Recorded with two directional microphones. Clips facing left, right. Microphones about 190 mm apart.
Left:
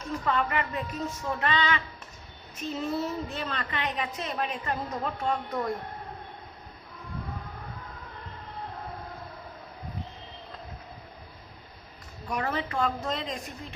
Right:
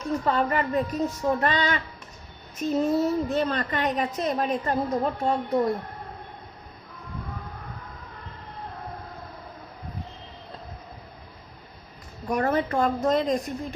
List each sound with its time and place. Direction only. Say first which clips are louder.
0.3 s a woman's voice: right 3 dB; 35° right (ahead or behind)
12.3 s a woman's voice: right 7 dB; 45° right (ahead or behind)